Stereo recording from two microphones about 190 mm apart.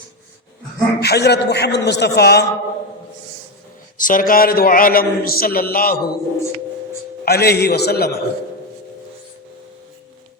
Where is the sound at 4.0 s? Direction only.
45° left (ahead or behind).